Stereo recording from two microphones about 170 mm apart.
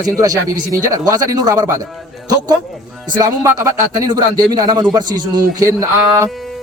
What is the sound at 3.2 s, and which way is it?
Speech, 15° right (ahead or behind).